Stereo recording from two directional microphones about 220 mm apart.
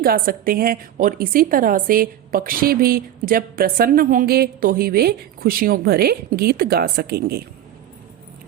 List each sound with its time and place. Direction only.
0.0 s a woman's voice: 40° right (ahead or behind)